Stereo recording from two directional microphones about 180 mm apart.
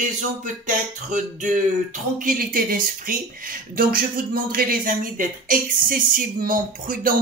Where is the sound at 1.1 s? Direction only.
45° right (ahead or behind).